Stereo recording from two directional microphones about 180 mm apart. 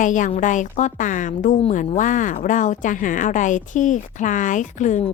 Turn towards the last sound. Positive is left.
turn(degrees=40)  # may be behind; listen again after turning